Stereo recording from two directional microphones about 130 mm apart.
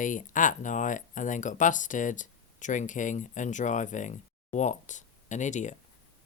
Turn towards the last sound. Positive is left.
turn(degrees=70)  # may be behind; listen again after turning